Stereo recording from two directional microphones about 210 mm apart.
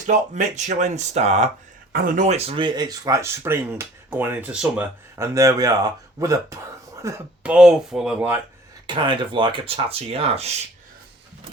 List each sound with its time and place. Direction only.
0.1 s speech: 35° right (ahead or behind); by 8.4 s 5° right (ahead or behind)
8.9 s speech: 20° right (ahead or behind)